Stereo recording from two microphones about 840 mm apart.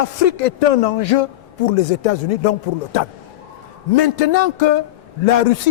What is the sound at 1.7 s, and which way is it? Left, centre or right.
A man's voice, left.